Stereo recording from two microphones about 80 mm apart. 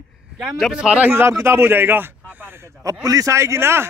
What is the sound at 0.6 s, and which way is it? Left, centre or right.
Speech, centre.